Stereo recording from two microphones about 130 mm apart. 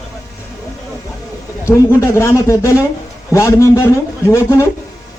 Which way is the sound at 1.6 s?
20° left (ahead or behind).